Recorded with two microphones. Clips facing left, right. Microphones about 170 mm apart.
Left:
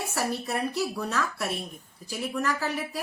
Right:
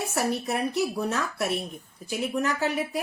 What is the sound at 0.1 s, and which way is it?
Speech, 20° right (ahead or behind).